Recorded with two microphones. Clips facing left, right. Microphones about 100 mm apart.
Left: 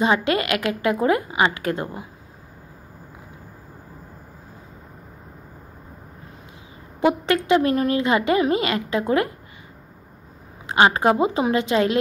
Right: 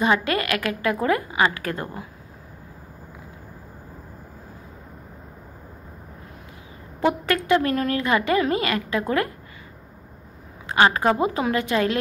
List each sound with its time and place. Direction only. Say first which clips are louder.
0.0 s a woman's voice: left 1 dB; 25° left (ahead or behind)
7.0 s a woman's voice: left 2 dB; 20° left (ahead or behind)
10.7 s a woman's voice: left 2 dB; 25° left (ahead or behind)